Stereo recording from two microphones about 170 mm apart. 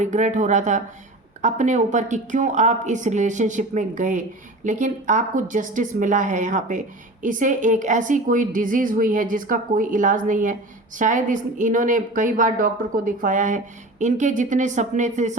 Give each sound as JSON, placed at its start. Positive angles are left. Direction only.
{"t": 0.0, "sound": "a woman's voice", "side_deg": -45}